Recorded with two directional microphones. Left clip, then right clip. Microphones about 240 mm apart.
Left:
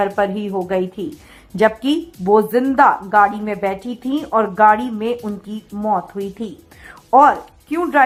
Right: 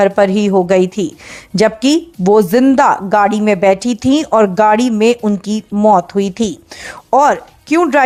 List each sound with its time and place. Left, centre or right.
0.0 s a woman's voice: right